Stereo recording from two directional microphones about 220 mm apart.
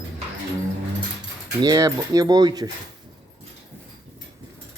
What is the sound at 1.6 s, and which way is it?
Speech, 15° right (ahead or behind).